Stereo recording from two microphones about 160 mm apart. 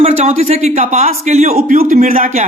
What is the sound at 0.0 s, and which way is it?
Speech, 45° right (ahead or behind).